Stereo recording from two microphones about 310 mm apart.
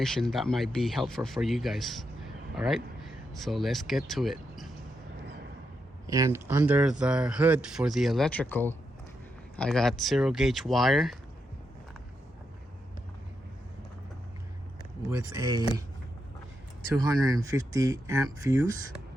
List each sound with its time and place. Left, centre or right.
0.0 s speech: centre
6.1 s speech: centre
15.4 s speech: centre
17.0 s speech: centre